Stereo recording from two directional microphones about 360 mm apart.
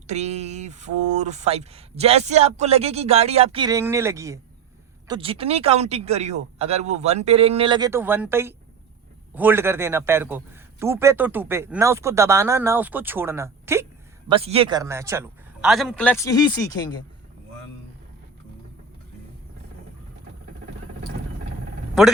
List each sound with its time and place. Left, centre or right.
0.1 s a man's voice: centre